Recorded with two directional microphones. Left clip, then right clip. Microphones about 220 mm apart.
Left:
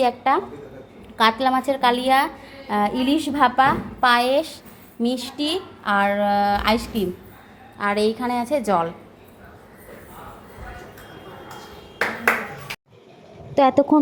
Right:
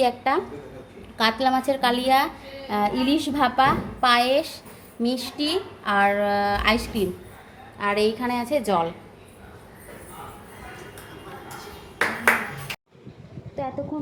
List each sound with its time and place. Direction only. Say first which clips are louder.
0.0 s a woman's voice: left 3 dB; 5° left (ahead or behind)
13.6 s a woman's voice: left 14 dB; 40° left (ahead or behind)